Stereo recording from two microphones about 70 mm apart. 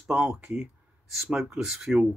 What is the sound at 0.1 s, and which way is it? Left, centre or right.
Speech, centre.